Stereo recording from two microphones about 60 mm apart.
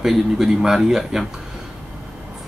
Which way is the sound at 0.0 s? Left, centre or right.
Centre.